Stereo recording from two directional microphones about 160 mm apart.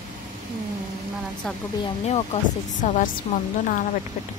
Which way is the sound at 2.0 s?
40° left (ahead or behind).